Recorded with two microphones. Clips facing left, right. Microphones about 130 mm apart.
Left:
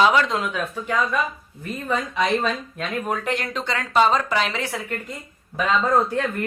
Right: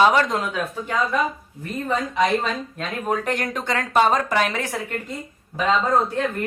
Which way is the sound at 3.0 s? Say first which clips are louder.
Right 5 dB; 40° right (ahead or behind).